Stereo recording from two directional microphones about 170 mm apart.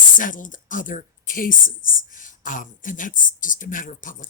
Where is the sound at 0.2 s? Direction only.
50° left (ahead or behind).